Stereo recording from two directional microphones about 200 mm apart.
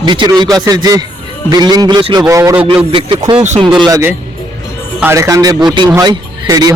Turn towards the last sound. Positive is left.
turn(degrees=-20)  # may be behind; listen again after turning